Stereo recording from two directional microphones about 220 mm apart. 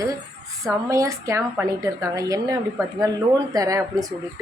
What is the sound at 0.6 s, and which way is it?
A woman's voice, 15° right (ahead or behind).